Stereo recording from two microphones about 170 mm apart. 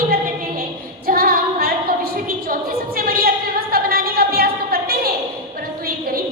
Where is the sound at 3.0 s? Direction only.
60° right (ahead or behind).